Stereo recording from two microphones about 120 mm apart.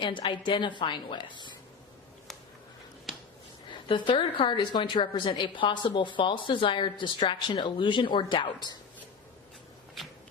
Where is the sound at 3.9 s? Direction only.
45° left (ahead or behind).